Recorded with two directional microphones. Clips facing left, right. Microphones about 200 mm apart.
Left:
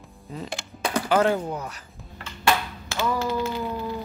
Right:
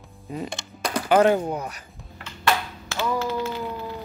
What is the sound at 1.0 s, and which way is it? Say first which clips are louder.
Speech: right 4 dB; 20° right (ahead or behind).